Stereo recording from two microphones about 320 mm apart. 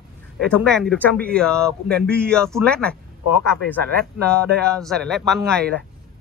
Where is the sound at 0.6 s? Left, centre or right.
Centre.